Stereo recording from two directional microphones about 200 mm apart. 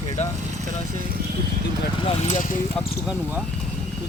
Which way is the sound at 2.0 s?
30° left (ahead or behind).